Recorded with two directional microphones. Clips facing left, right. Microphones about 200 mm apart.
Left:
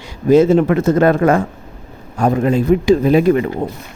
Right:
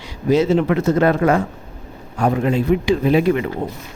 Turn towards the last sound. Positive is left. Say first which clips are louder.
# left 4 dB
turn(degrees=40)  # may be behind; listen again after turning